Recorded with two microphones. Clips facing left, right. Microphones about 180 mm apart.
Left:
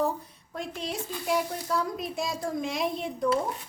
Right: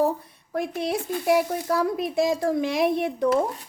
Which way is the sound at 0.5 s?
65° right (ahead or behind).